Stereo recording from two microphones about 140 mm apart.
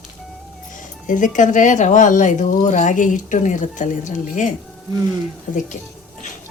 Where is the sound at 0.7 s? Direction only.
65° left (ahead or behind).